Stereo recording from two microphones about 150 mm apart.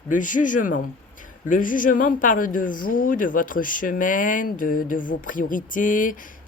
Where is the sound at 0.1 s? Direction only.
60° left (ahead or behind).